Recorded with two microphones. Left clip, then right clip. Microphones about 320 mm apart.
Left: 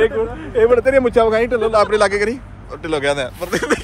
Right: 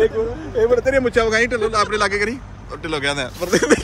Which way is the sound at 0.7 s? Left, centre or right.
Left.